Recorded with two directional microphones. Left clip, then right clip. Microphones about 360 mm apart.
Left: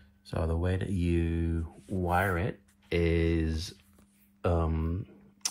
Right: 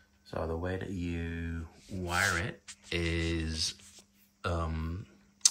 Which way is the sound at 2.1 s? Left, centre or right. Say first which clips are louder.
Left 1 dB; centre.